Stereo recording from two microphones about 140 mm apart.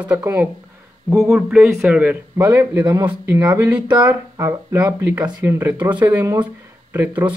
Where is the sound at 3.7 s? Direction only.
10° right (ahead or behind).